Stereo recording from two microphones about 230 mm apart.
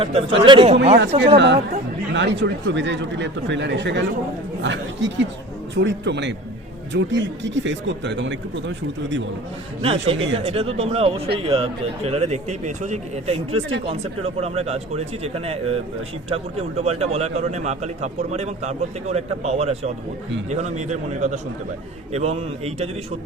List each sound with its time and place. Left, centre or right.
0.0 s speech: right
1.4 s speech: right
9.8 s a man's voice: right